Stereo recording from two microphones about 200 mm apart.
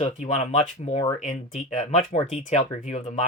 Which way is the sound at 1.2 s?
40° left (ahead or behind).